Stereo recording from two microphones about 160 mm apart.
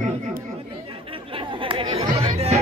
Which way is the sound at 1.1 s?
35° right (ahead or behind).